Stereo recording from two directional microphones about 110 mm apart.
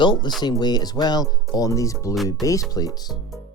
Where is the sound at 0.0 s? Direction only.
45° left (ahead or behind); by 2.9 s 30° left (ahead or behind).